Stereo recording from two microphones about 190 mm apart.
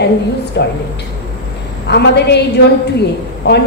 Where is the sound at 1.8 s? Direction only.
60° left (ahead or behind).